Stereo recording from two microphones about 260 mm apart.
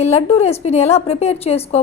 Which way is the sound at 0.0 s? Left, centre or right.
Left.